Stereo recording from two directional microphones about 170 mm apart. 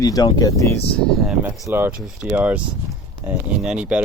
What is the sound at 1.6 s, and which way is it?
Speech, 15° right (ahead or behind).